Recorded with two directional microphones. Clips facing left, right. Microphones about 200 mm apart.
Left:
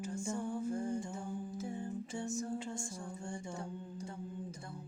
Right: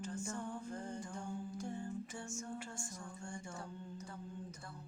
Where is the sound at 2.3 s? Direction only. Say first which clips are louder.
Left 7 dB; 35° left (ahead or behind).